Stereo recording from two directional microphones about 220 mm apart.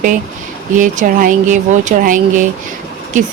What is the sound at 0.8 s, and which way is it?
Speech, 35° right (ahead or behind).